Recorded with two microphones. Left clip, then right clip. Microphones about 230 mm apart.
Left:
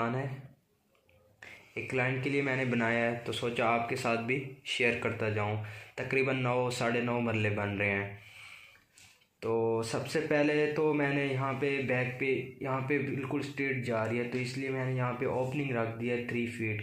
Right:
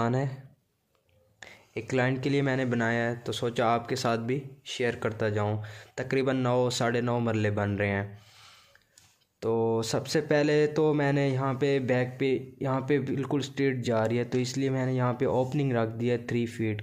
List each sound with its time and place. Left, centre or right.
0.0 s a man's voice: right
1.4 s speech: right